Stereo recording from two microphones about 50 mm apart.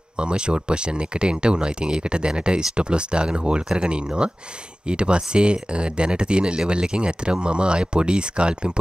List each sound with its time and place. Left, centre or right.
0.2 s speech: centre